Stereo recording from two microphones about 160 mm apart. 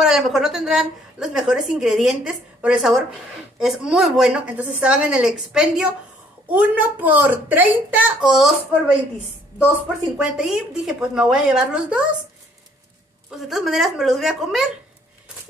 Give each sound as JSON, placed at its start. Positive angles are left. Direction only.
{"t": 0.0, "sound": "a woman's voice", "side_deg": 0}
{"t": 10.1, "sound": "a woman's voice", "side_deg": -5}
{"t": 13.5, "sound": "a woman's voice", "side_deg": 0}